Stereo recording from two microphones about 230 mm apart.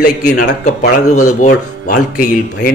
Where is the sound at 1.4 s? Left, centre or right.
Left.